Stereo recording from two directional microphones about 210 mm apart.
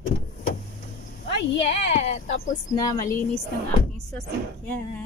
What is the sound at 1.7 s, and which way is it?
Speech, 30° left (ahead or behind).